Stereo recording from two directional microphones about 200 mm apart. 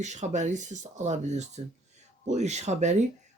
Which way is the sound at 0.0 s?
35° right (ahead or behind).